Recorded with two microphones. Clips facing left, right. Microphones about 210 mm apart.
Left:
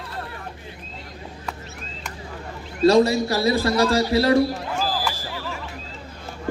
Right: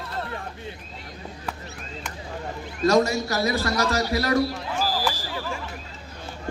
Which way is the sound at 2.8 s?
30° left (ahead or behind).